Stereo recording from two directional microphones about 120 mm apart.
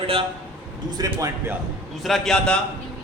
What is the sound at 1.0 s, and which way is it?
Speech, 25° right (ahead or behind).